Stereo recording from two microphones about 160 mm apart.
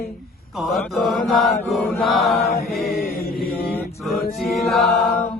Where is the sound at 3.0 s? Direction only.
70° left (ahead or behind).